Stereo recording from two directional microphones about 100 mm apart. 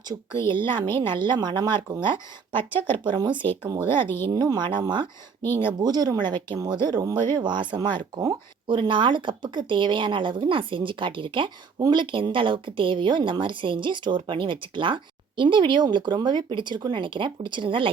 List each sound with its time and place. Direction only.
0.4 s a woman's voice: 50° right (ahead or behind)
2.7 s speech: 20° left (ahead or behind)
3.0 s a woman's voice: 50° right (ahead or behind)